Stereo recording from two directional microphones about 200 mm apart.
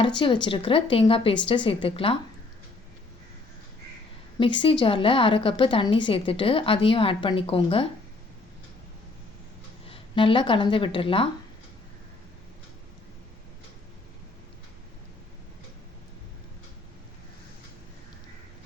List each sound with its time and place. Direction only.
0.4 s a woman's voice: 25° left (ahead or behind)
4.4 s a woman's voice: 25° left (ahead or behind)
9.9 s speech: 25° left (ahead or behind)